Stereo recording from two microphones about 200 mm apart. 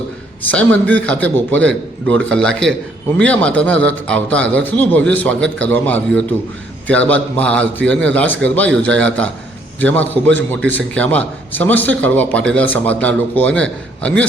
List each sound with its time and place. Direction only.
0.5 s a man's voice: 5° left (ahead or behind)